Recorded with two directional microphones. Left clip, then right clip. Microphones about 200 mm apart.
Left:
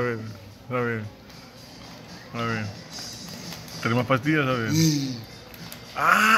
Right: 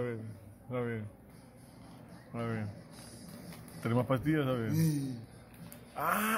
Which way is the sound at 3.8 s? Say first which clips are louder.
Left 9 dB; 15° right (ahead or behind).